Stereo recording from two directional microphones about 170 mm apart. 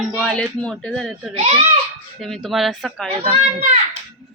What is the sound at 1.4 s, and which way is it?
Speech, 40° right (ahead or behind).